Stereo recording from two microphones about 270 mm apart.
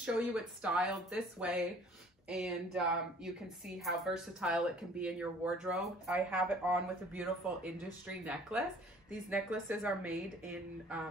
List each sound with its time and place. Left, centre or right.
0.0 s a woman's voice: centre